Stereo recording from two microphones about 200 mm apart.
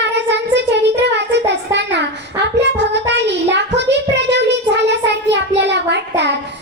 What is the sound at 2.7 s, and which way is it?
Child singing, 60° right (ahead or behind).